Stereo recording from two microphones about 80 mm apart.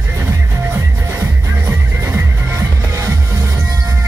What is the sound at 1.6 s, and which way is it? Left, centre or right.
Music, right.